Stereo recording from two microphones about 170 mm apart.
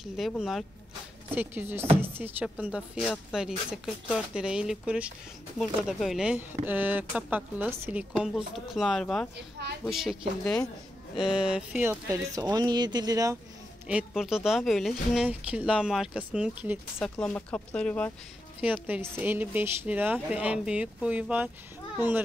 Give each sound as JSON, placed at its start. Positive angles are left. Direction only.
{"t": 0.0, "sound": "speech", "side_deg": 0}
{"t": 1.3, "sound": "speech", "side_deg": -10}
{"t": 13.8, "sound": "speech", "side_deg": -5}
{"t": 17.0, "sound": "speech", "side_deg": 5}
{"t": 18.6, "sound": "speech", "side_deg": -10}